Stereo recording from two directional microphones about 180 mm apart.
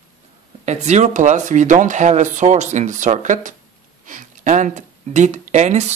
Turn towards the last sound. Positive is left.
turn(degrees=-40)  # may be behind; listen again after turning